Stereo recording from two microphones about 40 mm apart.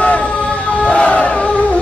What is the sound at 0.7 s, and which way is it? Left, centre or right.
Crowd, left.